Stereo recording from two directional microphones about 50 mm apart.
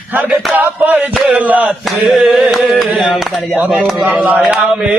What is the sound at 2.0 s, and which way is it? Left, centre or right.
Carnatic music, centre.